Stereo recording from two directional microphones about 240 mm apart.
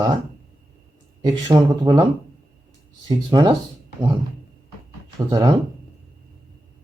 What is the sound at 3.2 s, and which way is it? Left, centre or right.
Speech, centre.